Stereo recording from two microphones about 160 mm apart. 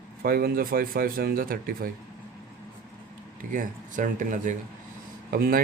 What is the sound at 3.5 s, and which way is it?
Speech, 55° right (ahead or behind).